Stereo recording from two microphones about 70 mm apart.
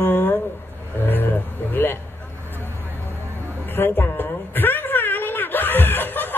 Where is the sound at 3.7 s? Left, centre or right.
Left.